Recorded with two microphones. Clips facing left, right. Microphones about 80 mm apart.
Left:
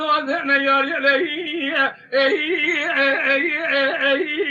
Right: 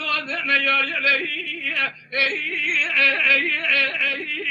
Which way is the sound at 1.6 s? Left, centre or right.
Left.